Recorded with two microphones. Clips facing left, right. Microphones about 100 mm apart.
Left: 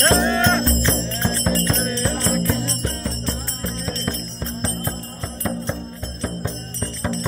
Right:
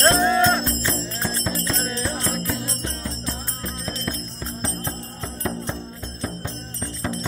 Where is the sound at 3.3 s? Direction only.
15° right (ahead or behind).